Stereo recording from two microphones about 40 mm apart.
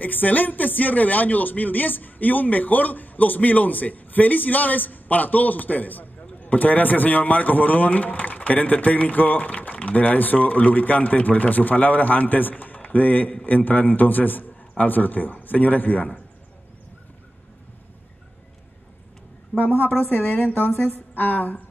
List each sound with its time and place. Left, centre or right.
0.0 s a man's voice: left
9.5 s a man's voice: left
19.6 s a man's voice: left